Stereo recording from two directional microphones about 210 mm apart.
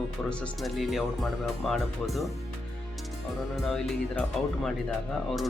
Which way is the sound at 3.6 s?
Centre (ahead or behind).